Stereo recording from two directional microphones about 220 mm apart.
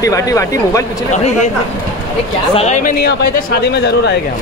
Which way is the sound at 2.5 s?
30° left (ahead or behind).